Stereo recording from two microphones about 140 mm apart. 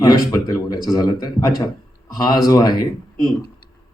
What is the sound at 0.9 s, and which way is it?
A man's voice, 30° left (ahead or behind).